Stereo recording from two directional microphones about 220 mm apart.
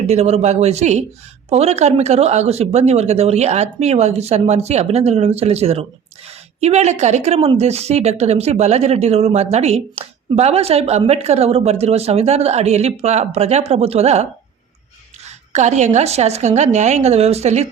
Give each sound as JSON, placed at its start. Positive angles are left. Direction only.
{"t": 0.1, "sound": "a woman's voice", "side_deg": -30}